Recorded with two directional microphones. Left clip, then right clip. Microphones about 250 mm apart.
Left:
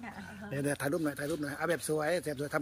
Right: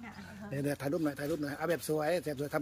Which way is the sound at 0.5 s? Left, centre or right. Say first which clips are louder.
Left 2 dB; centre.